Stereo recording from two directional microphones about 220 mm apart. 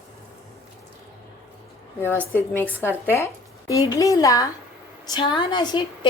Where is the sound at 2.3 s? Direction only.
10° left (ahead or behind).